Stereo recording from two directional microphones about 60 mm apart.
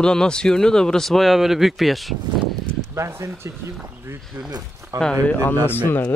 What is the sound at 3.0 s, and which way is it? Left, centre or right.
Speech, right.